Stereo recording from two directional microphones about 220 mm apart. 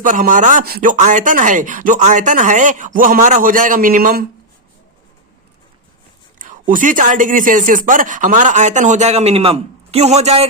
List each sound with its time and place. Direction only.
0.0 s speech: 35° right (ahead or behind)
6.4 s speech: 35° right (ahead or behind)